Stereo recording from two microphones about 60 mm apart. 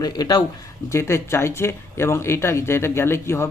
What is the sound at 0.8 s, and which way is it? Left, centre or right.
Speech, left.